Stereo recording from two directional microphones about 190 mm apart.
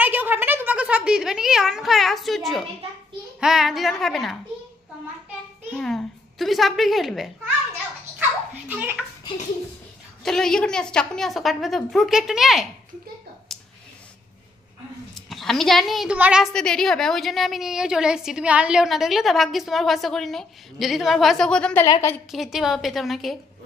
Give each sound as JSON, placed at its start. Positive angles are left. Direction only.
{"t": 0.0, "sound": "a sound", "side_deg": -10}
{"t": 3.3, "sound": "a woman's voice", "side_deg": 0}
{"t": 5.7, "sound": "a child's voice", "side_deg": 0}
{"t": 8.6, "sound": "a child's voice", "side_deg": -10}
{"t": 10.2, "sound": "a woman's voice", "side_deg": 5}
{"t": 13.5, "sound": "clicking", "side_deg": 0}
{"t": 15.1, "sound": "a woman's voice", "side_deg": 0}
{"t": 21.8, "sound": "a woman's voice", "side_deg": 20}
{"t": 22.3, "sound": "a woman's voice", "side_deg": 0}